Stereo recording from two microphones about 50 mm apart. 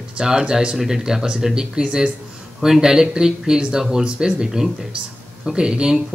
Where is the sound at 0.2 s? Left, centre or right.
Centre.